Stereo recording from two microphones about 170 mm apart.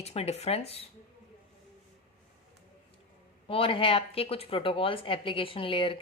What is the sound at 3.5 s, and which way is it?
A woman's voice, 30° left (ahead or behind).